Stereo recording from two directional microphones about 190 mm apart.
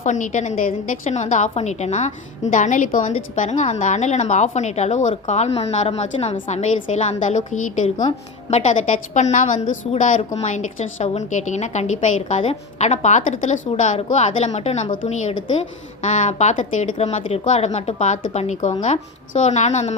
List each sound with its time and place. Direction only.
0.0 s a woman's voice: 40° left (ahead or behind)